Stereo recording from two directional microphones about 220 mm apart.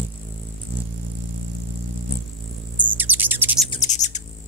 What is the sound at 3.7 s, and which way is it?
Bird, 30° left (ahead or behind).